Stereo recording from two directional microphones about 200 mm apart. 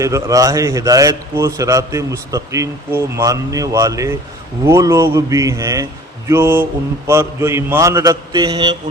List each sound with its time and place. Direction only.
0.0 s a man's voice: 15° right (ahead or behind)